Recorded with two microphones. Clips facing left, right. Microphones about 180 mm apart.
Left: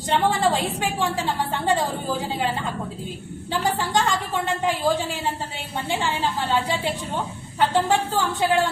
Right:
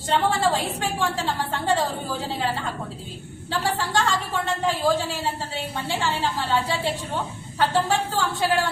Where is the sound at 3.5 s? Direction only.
15° left (ahead or behind).